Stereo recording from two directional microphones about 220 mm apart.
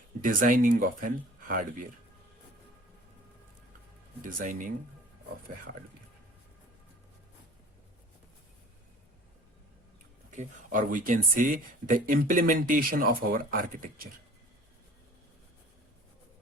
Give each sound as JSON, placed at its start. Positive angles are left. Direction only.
{"t": 0.2, "sound": "speech", "side_deg": -40}
{"t": 4.2, "sound": "speech", "side_deg": -40}
{"t": 10.3, "sound": "speech", "side_deg": -35}